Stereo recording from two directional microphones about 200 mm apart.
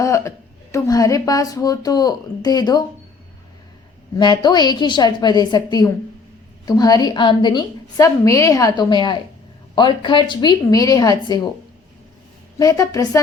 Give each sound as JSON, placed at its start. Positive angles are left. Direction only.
{"t": 0.0, "sound": "a woman's voice", "side_deg": 15}
{"t": 4.2, "sound": "a woman's voice", "side_deg": 20}
{"t": 12.5, "sound": "a woman's voice", "side_deg": 15}